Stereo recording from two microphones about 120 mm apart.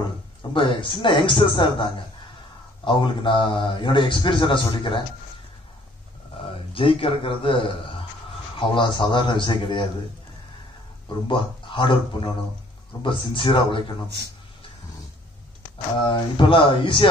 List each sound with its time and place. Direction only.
0.5 s a man's voice: 45° left (ahead or behind)
6.7 s a man's voice: 50° left (ahead or behind)
11.2 s speech: 40° left (ahead or behind)
13.0 s speech: 45° left (ahead or behind)
16.1 s speech: 45° left (ahead or behind)